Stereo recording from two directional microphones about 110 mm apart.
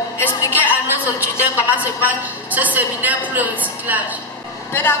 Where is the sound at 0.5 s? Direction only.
15° right (ahead or behind).